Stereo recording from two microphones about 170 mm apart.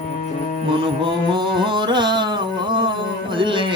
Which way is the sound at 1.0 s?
30° right (ahead or behind).